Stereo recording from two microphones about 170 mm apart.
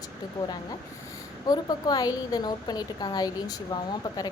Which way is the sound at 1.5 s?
25° left (ahead or behind).